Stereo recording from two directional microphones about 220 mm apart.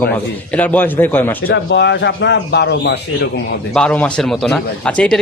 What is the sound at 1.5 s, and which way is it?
Speech, 50° left (ahead or behind).